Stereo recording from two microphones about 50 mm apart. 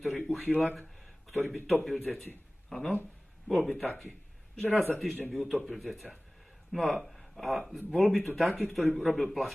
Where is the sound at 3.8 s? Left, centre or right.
Centre.